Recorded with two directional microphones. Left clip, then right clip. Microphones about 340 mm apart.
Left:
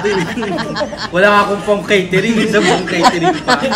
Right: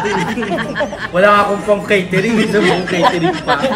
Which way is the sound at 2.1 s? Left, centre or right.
Centre.